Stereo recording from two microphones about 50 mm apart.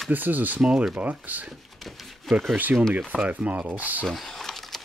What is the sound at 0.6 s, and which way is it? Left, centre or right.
Speech, centre.